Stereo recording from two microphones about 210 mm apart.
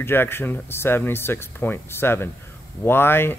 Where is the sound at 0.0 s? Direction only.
10° left (ahead or behind).